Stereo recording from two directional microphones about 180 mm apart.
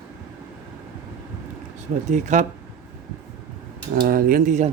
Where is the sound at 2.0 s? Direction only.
40° right (ahead or behind).